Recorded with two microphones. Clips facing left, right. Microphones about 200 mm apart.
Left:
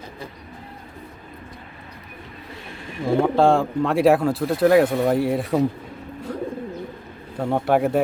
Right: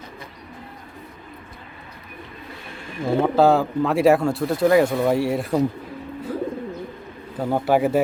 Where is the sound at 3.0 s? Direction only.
Centre (ahead or behind).